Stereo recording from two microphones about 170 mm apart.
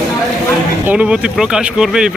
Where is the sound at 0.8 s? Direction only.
5° right (ahead or behind).